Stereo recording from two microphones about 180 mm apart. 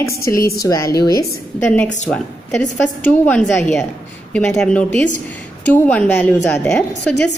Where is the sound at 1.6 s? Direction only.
10° left (ahead or behind).